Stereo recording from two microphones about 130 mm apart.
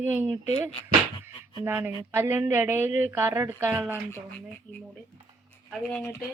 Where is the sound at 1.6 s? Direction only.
15° right (ahead or behind).